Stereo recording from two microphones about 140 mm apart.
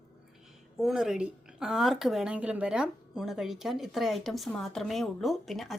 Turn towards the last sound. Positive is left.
turn(degrees=0)  # may be behind; listen again after turning